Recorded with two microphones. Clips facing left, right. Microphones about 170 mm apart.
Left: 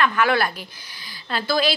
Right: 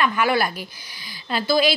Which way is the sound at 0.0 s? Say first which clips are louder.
Even; 10° right (ahead or behind).